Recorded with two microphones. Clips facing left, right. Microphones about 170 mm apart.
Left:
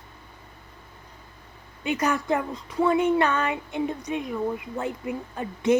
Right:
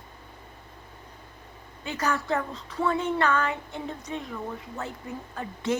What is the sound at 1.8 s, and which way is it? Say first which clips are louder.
Speech: left 4 dB; 15° left (ahead or behind).